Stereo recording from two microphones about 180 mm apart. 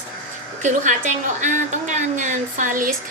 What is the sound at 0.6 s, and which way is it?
A woman's voice, 45° right (ahead or behind).